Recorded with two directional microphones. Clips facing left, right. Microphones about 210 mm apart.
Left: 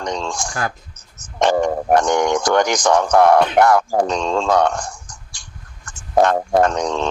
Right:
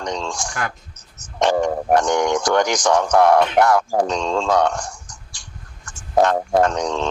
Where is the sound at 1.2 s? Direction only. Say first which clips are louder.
Left 1 dB; 50° left (ahead or behind).